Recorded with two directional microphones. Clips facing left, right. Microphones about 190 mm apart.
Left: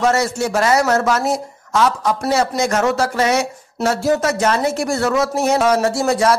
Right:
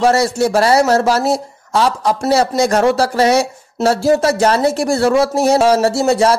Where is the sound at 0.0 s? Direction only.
35° right (ahead or behind).